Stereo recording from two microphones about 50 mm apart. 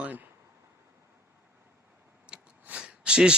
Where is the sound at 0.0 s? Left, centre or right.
Right.